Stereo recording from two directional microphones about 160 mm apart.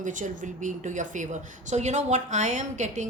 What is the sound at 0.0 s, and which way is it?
Speech, 50° right (ahead or behind).